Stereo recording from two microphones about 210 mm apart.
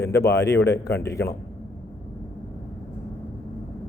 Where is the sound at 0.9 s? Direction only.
15° left (ahead or behind).